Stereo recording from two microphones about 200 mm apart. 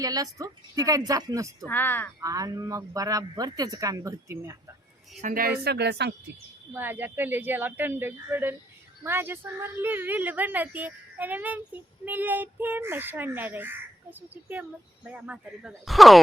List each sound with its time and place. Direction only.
0.0 s a woman's voice: 20° right (ahead or behind)
1.6 s speech: 10° left (ahead or behind)
2.2 s a woman's voice: 20° right (ahead or behind)
5.2 s speech: 45° right (ahead or behind)
6.7 s a woman's voice: 10° right (ahead or behind)